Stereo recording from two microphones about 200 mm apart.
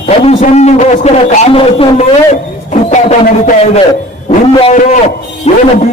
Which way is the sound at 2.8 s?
40° left (ahead or behind).